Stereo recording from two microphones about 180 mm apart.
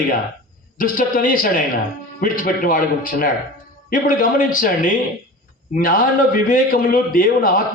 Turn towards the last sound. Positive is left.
turn(degrees=50)  # may be behind; listen again after turning